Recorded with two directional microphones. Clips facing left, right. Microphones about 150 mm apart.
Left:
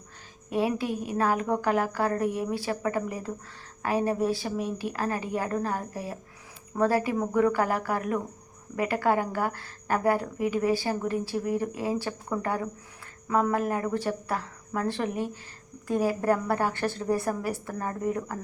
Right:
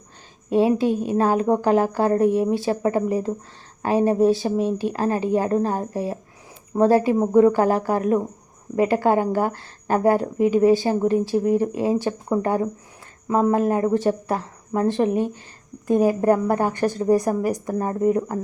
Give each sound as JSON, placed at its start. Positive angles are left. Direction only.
{"t": 0.5, "sound": "a woman's voice", "side_deg": -25}